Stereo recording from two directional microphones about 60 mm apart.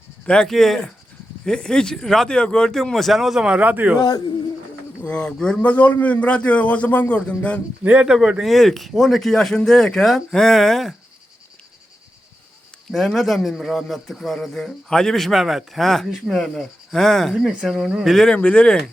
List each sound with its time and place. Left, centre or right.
0.4 s speech: centre
3.6 s speech: right
5.0 s speech: centre
5.6 s a man's voice: left
8.0 s speech: centre
8.5 s speech: centre
12.9 s speech: centre
18.3 s a man's voice: centre